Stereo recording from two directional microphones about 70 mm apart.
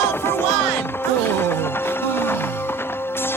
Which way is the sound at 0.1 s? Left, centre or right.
Left.